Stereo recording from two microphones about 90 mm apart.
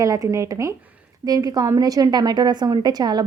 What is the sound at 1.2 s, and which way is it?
A woman's voice, 45° right (ahead or behind).